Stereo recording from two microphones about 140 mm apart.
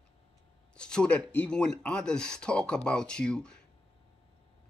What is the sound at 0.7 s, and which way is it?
A man's voice, 5° left (ahead or behind).